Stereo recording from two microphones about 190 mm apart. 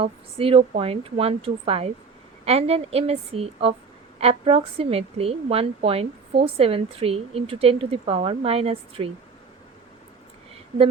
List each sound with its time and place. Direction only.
0.0 s a woman's voice: 30° right (ahead or behind)